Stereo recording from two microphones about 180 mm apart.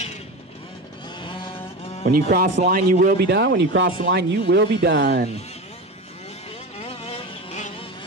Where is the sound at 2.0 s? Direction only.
55° right (ahead or behind).